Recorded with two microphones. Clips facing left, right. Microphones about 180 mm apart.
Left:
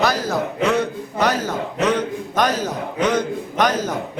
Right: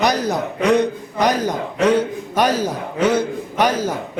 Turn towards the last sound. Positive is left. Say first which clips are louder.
# right 1 dB
turn(degrees=-10)  # may be behind; listen again after turning